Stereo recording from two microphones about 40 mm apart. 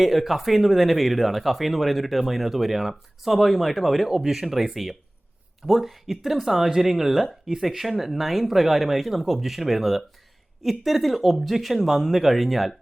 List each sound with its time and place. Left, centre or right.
0.0 s speech: centre